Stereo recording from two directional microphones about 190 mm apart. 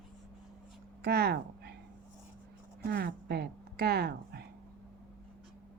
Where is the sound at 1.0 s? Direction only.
55° right (ahead or behind).